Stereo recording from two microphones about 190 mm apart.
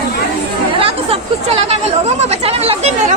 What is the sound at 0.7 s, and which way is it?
Chatter, 30° right (ahead or behind).